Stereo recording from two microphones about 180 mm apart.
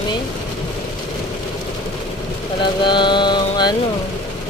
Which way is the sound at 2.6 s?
25° left (ahead or behind).